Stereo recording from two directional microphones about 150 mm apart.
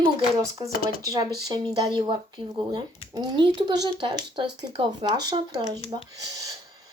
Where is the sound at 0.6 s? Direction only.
25° right (ahead or behind).